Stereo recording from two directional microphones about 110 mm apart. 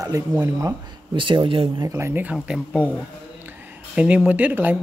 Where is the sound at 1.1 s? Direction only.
50° right (ahead or behind).